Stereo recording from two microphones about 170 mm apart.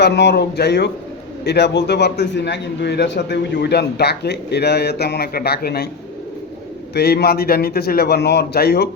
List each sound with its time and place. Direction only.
0.0 s a man's voice: 85° left; by 5.9 s 65° left (ahead or behind)
6.9 s a man's voice: 70° left (ahead or behind)